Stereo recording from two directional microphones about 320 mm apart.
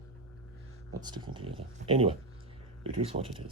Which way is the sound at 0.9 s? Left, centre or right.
Centre.